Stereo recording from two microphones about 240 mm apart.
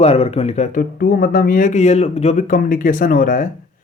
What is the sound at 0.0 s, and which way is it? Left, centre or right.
Speech, left.